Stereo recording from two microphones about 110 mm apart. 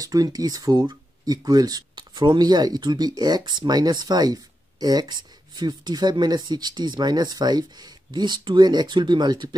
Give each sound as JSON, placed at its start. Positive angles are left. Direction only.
{"t": 0.0, "sound": "speech", "side_deg": -35}